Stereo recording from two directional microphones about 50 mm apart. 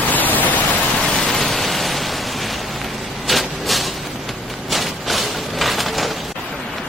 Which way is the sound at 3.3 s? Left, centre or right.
Centre.